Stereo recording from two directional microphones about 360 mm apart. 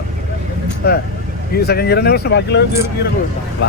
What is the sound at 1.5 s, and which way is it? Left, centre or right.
Speech, left.